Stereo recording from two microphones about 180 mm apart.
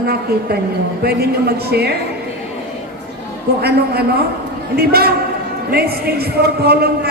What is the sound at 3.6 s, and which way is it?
A man's voice, 60° right (ahead or behind).